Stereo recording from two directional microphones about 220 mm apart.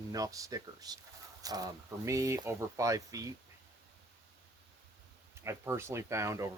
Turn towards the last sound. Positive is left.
turn(degrees=-15)  # may be behind; listen again after turning